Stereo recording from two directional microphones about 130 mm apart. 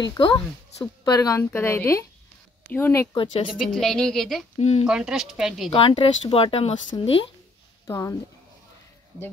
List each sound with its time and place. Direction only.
0.0 s speech: 35° left (ahead or behind)
1.0 s a woman's voice: 25° left (ahead or behind)
3.5 s a woman's voice: 5° left (ahead or behind)
4.6 s speech: 55° left (ahead or behind)
4.8 s a woman's voice: 5° right (ahead or behind)
5.7 s speech: 45° left (ahead or behind)
6.9 s speech: 35° left (ahead or behind)
7.8 s speech: 25° left (ahead or behind)